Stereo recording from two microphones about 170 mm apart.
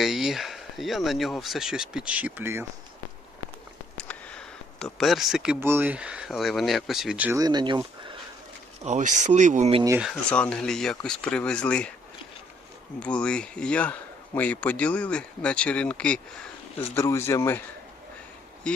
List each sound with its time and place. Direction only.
0.0 s speech: centre (ahead or behind)
3.9 s a sound: 5° left (ahead or behind)
5.5 s speech: 15° right (ahead or behind)
7.3 s speech: 25° right (ahead or behind)
8.8 s speech: 45° right (ahead or behind)
10.0 s speech: 5° left (ahead or behind)
13.0 s speech: 5° left (ahead or behind)